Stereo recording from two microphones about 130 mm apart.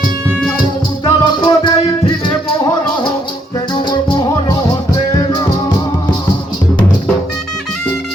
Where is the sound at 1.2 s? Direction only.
35° left (ahead or behind).